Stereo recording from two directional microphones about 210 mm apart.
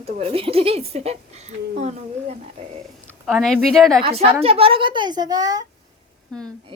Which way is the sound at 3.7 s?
Centre (ahead or behind).